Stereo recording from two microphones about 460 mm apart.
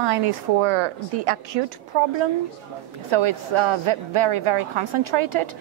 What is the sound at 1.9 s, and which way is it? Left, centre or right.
A woman's voice, right.